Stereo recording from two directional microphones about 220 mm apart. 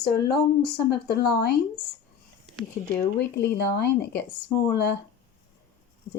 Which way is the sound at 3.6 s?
50° left (ahead or behind).